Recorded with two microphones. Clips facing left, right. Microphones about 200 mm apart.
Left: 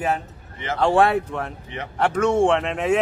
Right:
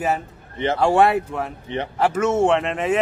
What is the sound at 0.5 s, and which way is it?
Speech, 30° right (ahead or behind).